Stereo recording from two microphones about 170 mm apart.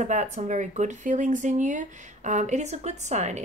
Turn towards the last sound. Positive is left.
turn(degrees=-45)  # may be behind; listen again after turning